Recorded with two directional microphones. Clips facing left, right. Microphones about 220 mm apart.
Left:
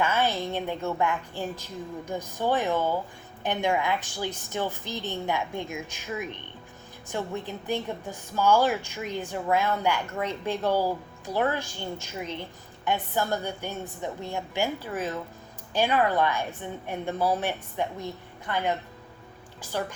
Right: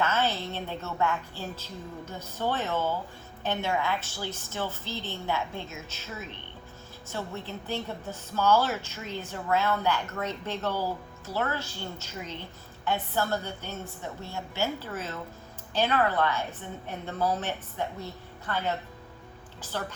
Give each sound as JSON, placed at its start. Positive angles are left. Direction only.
{"t": 0.0, "sound": "a woman's voice", "side_deg": 15}
{"t": 12.8, "sound": "a woman's voice", "side_deg": 15}
{"t": 19.7, "sound": "a woman's voice", "side_deg": 15}